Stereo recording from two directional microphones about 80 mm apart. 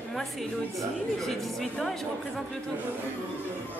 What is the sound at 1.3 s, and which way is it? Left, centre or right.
Speech, centre.